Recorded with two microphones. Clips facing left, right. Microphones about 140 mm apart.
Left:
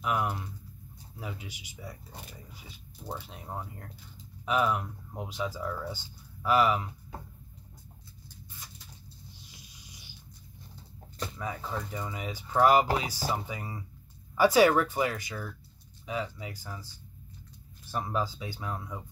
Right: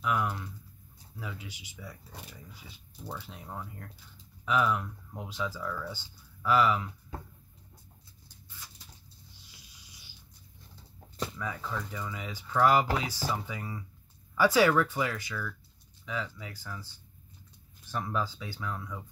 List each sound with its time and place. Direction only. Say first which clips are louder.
0.0 s a sound: even; 20° left (ahead or behind)
1.2 s speech: left 1 dB; 15° left (ahead or behind)
3.1 s speech: left 2 dB; 25° left (ahead or behind)
9.5 s snort: left 5 dB; 15° left (ahead or behind)
11.3 s speech: left 4 dB; 25° left (ahead or behind)